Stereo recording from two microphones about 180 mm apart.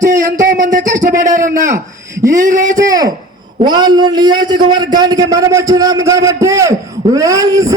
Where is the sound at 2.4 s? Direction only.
45° right (ahead or behind).